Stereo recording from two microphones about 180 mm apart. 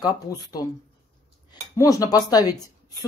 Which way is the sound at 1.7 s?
20° left (ahead or behind).